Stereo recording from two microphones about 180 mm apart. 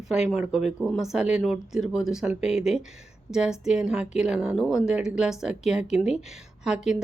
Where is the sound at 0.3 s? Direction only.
5° right (ahead or behind).